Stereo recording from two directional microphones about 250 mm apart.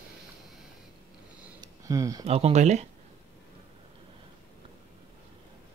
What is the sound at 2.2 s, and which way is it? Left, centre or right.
Speech, right.